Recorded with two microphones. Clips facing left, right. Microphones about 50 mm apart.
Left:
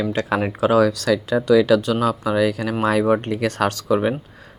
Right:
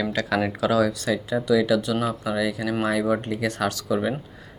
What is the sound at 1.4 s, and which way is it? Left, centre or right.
Speech, left.